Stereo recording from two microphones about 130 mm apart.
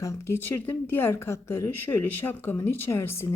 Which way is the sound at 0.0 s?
20° left (ahead or behind).